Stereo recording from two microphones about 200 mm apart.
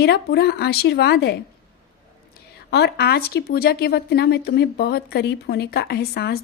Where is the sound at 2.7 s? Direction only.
55° left (ahead or behind).